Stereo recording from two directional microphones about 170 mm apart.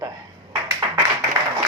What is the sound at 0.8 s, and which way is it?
Clapping, 30° right (ahead or behind).